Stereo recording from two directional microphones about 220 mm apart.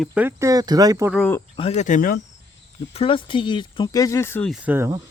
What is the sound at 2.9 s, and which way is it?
Speech, 25° left (ahead or behind).